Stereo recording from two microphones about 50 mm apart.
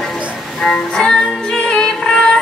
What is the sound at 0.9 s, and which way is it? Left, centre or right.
Music, centre.